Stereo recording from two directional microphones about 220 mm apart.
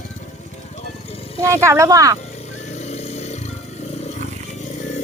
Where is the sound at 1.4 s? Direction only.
10° right (ahead or behind).